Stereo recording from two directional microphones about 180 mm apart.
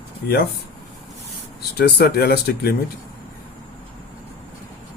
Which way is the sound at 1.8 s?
60° left (ahead or behind).